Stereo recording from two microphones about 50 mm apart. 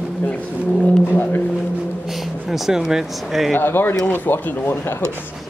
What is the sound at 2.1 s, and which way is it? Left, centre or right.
Speech, centre.